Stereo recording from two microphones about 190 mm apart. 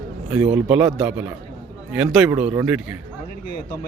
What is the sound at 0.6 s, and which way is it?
A man's voice, 5° right (ahead or behind).